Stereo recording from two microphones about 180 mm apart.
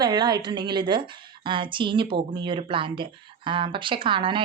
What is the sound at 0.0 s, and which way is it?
Speech, 20° right (ahead or behind).